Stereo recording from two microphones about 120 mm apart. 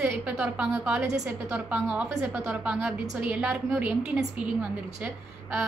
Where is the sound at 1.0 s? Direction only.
25° right (ahead or behind).